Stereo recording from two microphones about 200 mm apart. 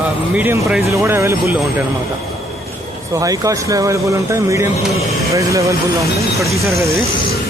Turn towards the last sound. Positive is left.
turn(degrees=0)  # may be behind; listen again after turning